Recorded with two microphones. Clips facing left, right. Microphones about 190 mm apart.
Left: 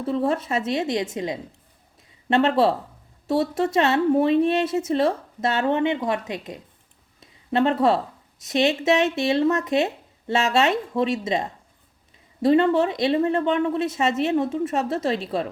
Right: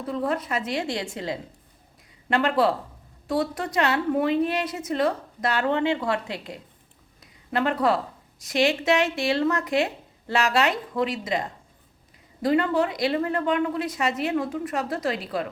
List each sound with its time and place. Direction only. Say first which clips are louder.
0.0 s a woman's voice: left 4 dB; 25° left (ahead or behind)
7.2 s a sound: left 5 dB; 25° left (ahead or behind)
8.4 s a woman's voice: left 2 dB; 25° left (ahead or behind)